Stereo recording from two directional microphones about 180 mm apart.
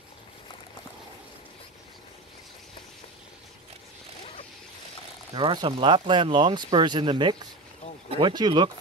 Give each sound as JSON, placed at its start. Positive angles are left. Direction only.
{"t": 5.3, "sound": "speech", "side_deg": -25}